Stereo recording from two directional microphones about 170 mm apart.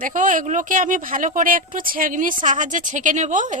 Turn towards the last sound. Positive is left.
turn(degrees=-45)  # may be behind; listen again after turning